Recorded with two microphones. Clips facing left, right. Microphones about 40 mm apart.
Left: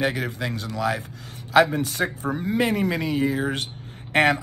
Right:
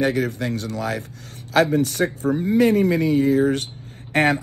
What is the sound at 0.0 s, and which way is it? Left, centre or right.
A man's voice, left.